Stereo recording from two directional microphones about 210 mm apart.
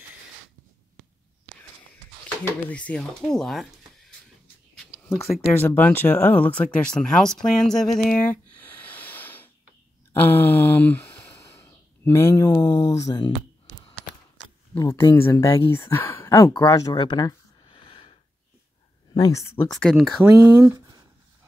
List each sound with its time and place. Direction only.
2.4 s speech: 5° left (ahead or behind)
5.1 s speech: centre (ahead or behind)
5.6 s speech: 10° left (ahead or behind)
8.0 s a sound: 5° left (ahead or behind)
10.2 s speech: 10° left (ahead or behind)
14.8 s speech: 15° left (ahead or behind)
19.1 s speech: 15° left (ahead or behind)
19.7 s speech: centre (ahead or behind)
20.3 s speech: 15° right (ahead or behind)